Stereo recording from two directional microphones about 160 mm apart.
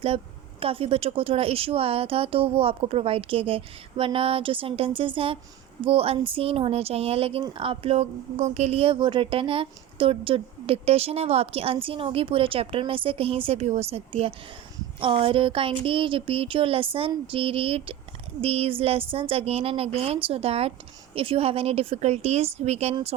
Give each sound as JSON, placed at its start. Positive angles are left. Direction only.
{"t": 0.6, "sound": "speech", "side_deg": -35}